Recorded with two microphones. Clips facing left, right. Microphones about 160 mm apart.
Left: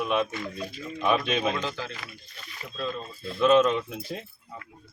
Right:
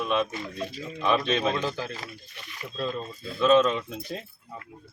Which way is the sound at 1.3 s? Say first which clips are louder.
Right 1 dB; 15° left (ahead or behind).